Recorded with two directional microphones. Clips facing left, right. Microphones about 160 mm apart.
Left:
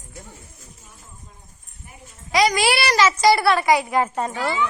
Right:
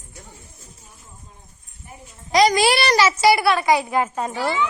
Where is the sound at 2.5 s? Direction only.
25° right (ahead or behind).